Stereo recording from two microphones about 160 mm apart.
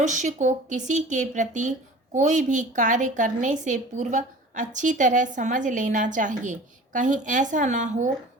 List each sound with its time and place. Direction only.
0.0 s a woman's voice: 50° right (ahead or behind)